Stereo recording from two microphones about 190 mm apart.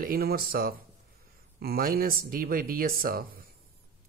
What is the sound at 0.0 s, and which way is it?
Speech, 50° right (ahead or behind).